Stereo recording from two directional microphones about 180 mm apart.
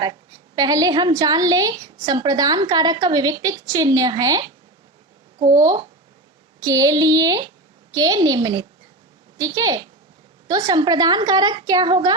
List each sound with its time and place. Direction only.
0.0 s a woman's voice: 20° right (ahead or behind)
5.5 s a woman's voice: 25° right (ahead or behind)